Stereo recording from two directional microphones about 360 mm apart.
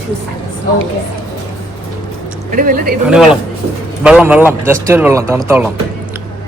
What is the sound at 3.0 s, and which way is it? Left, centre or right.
A man's voice, centre.